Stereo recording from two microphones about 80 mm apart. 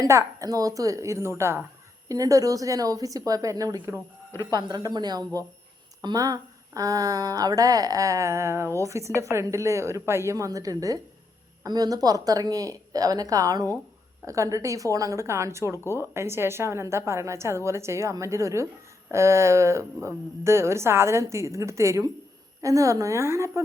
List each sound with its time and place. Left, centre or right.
0.1 s a woman's voice: right
2.0 s speech: right
4.7 s a woman's voice: right